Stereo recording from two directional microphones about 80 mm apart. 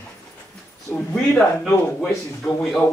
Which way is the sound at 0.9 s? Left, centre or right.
Left.